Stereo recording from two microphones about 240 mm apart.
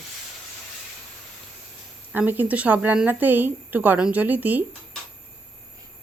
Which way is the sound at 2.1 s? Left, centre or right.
Centre.